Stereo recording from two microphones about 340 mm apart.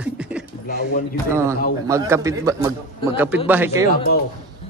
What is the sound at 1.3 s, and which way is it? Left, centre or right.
A man's voice, centre.